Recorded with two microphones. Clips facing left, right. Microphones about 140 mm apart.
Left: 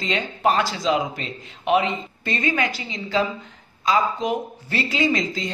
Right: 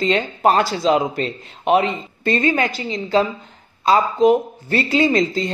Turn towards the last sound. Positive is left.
turn(degrees=-40)  # may be behind; listen again after turning